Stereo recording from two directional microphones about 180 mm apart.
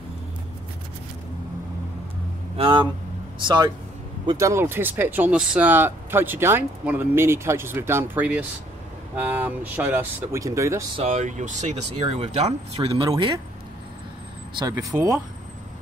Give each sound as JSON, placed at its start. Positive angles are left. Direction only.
{"t": 2.5, "sound": "speech", "side_deg": -25}
{"t": 11.0, "sound": "speech", "side_deg": -40}
{"t": 12.7, "sound": "speech", "side_deg": -25}
{"t": 14.6, "sound": "speech", "side_deg": -20}